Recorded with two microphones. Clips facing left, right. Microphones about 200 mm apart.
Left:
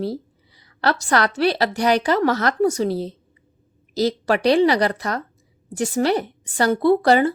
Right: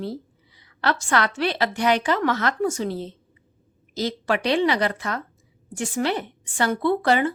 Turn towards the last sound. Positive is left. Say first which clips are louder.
# left 5 dB
turn(degrees=35)  # may be behind; listen again after turning